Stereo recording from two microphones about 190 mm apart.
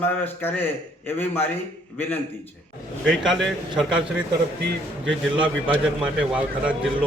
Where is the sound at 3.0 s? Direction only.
Centre (ahead or behind).